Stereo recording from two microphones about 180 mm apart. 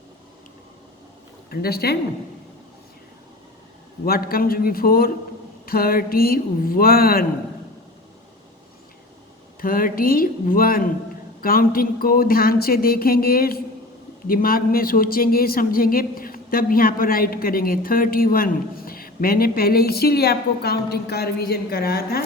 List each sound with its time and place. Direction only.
1.5 s speech: 60° left (ahead or behind)
4.0 s speech: 55° left (ahead or behind)
9.6 s speech: 50° left (ahead or behind)